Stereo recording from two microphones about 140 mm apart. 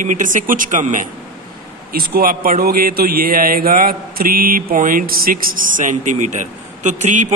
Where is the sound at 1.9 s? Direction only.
90° right.